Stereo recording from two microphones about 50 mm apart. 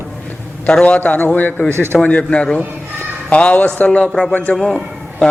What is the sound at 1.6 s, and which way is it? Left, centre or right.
Speech, right.